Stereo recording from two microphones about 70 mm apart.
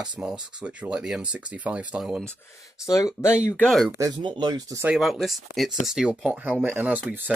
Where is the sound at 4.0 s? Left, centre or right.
Right.